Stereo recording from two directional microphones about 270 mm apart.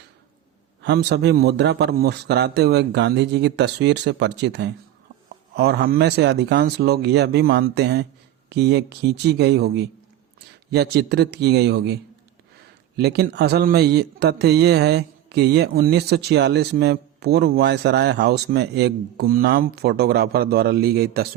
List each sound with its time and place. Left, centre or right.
0.8 s a man's voice: right
13.0 s a man's voice: right